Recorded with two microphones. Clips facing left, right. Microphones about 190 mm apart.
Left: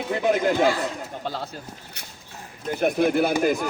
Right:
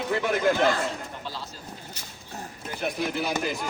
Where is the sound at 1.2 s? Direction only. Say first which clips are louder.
Left 6 dB; 55° left (ahead or behind).